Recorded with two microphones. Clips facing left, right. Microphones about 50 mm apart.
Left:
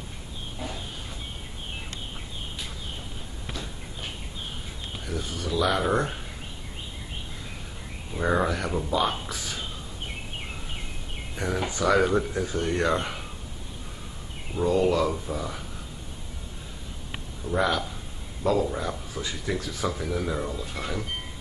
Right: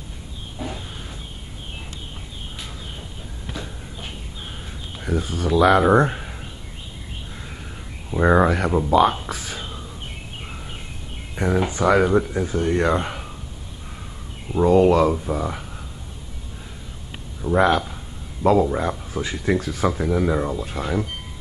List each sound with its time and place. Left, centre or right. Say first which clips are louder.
5.0 s speech: right 9 dB; right
8.1 s speech: right 8 dB; right
11.3 s speech: right 7 dB; right
14.5 s speech: right 8 dB; right
17.4 s speech: right 7 dB; right